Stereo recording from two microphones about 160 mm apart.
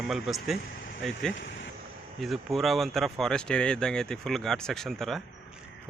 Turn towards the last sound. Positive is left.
turn(degrees=0)  # may be behind; listen again after turning